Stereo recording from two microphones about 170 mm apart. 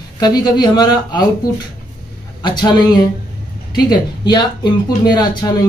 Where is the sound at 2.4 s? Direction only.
25° left (ahead or behind).